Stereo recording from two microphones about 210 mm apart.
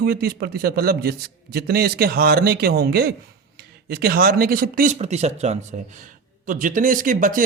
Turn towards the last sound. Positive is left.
turn(degrees=-40)  # may be behind; listen again after turning